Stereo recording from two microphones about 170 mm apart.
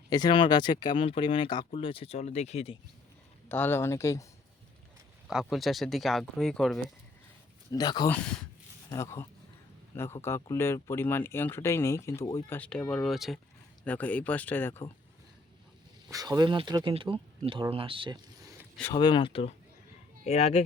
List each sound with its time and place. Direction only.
0.1 s speech: 25° left (ahead or behind)
3.5 s speech: 10° left (ahead or behind)
5.3 s speech: centre (ahead or behind)
7.7 s speech: 25° left (ahead or behind)
16.0 s speech: 20° right (ahead or behind)
18.9 s speech: 30° left (ahead or behind)